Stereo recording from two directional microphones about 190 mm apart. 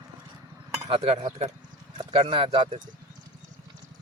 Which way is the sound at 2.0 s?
30° right (ahead or behind).